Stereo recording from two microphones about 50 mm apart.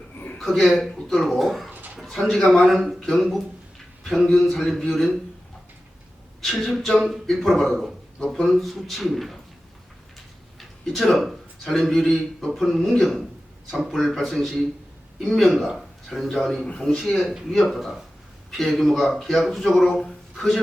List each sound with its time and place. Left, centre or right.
0.3 s speech: centre
6.4 s a sound: centre
6.7 s speech: centre
10.6 s a sound: centre
11.1 s speech: centre
15.5 s a man's voice: centre
16.6 s speech: centre
17.0 s speech: centre